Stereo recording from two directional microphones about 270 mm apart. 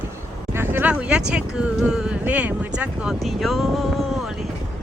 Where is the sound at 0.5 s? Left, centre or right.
Centre.